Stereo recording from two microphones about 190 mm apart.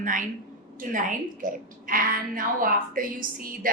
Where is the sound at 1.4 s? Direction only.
45° right (ahead or behind).